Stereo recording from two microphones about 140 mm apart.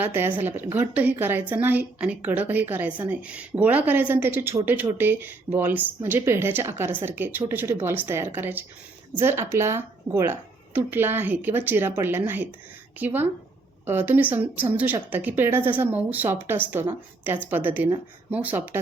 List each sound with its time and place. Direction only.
0.0 s a woman's voice: 15° right (ahead or behind)